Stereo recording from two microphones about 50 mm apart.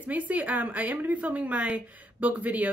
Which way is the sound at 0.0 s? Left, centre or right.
Right.